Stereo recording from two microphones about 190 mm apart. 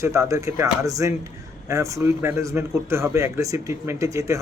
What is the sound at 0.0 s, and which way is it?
A man's voice, 15° right (ahead or behind).